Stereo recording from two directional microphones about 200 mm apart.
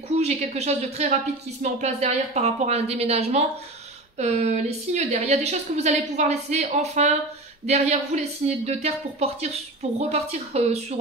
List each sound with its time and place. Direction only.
0.1 s a woman's voice: 35° right (ahead or behind)